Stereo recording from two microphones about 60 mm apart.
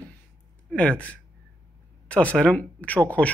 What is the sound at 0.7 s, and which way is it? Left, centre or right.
Speech, left.